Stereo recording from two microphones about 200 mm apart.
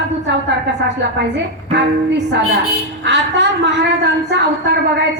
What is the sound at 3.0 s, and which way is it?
A woman's voice, 60° right (ahead or behind).